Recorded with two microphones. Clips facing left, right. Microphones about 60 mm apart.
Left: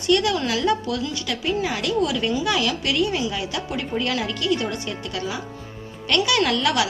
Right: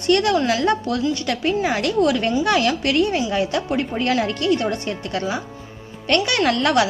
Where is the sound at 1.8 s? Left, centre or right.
Right.